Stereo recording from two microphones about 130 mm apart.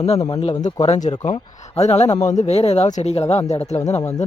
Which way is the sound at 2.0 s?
20° left (ahead or behind).